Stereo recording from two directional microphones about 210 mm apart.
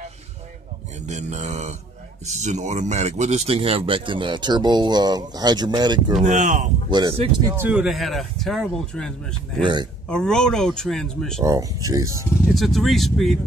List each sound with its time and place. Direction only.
1.0 s mantra: 35° right (ahead or behind)
2.2 s speech: 35° right (ahead or behind)
6.2 s mantra: 35° right (ahead or behind)
6.9 s speech: 25° right (ahead or behind)
7.5 s speech: 5° right (ahead or behind)
9.6 s speech: 20° right (ahead or behind)
10.0 s speech: 5° left (ahead or behind)
11.4 s speech: 15° right (ahead or behind)
12.5 s speech: centre (ahead or behind)